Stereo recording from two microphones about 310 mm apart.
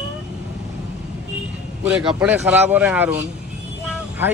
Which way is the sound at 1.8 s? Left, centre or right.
Centre.